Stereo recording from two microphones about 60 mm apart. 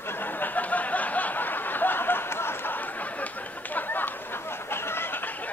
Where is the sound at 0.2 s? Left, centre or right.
Left.